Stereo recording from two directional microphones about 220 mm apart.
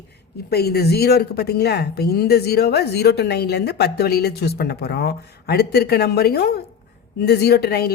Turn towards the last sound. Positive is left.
turn(degrees=45)  # may be behind; listen again after turning